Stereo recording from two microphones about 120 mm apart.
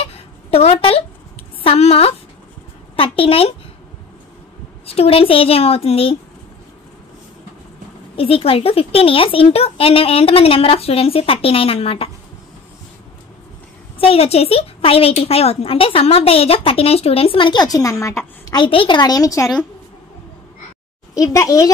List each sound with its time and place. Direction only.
0.0 s a sound: 55° left (ahead or behind)
4.8 s a woman's voice: 55° left (ahead or behind)
8.2 s a woman's voice: 50° left (ahead or behind)
13.9 s a woman's voice: 55° left (ahead or behind); by 18.6 s 25° left (ahead or behind)
18.6 s a woman's voice: 45° left (ahead or behind); by 19.5 s 25° left (ahead or behind)
21.1 s speech: 30° left (ahead or behind)